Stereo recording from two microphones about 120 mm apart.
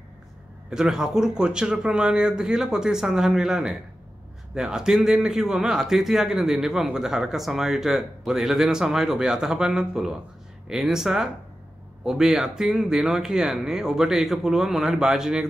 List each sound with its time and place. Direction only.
0.7 s speech: 5° right (ahead or behind)